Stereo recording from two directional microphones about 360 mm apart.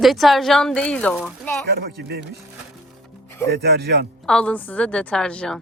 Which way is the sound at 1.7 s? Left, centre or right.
Right.